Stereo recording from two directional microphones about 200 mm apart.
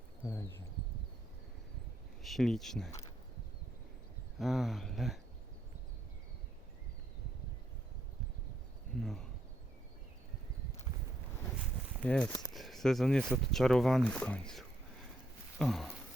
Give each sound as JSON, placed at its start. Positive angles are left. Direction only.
{"t": 0.3, "sound": "bird", "side_deg": 15}
{"t": 2.2, "sound": "speech", "side_deg": 0}
{"t": 4.4, "sound": "speech", "side_deg": 0}
{"t": 9.0, "sound": "speech", "side_deg": 0}
{"t": 12.0, "sound": "speech", "side_deg": 5}
{"t": 15.5, "sound": "a sound", "side_deg": 0}